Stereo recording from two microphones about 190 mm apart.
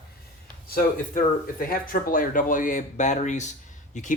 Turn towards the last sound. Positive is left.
turn(degrees=40)  # may be behind; listen again after turning